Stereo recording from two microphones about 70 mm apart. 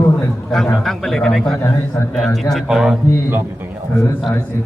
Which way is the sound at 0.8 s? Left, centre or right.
Centre.